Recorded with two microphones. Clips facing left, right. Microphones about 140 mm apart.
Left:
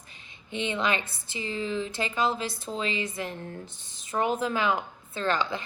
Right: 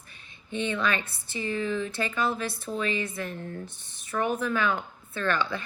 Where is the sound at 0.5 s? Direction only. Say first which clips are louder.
Even; 20° left (ahead or behind).